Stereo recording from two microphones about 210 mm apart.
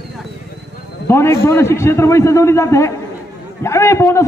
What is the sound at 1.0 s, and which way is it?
A man's voice, 10° left (ahead or behind).